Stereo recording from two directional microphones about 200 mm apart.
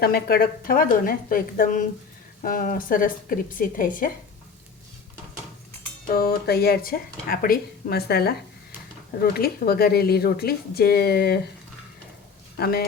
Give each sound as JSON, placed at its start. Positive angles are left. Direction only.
{"t": 0.0, "sound": "speech", "side_deg": 50}
{"t": 6.1, "sound": "speech", "side_deg": 50}
{"t": 12.5, "sound": "speech", "side_deg": 50}